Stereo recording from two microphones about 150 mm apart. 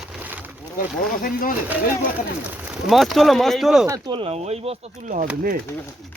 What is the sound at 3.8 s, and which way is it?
Speech, 25° right (ahead or behind).